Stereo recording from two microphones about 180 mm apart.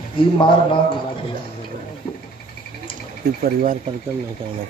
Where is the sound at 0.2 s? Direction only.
30° left (ahead or behind).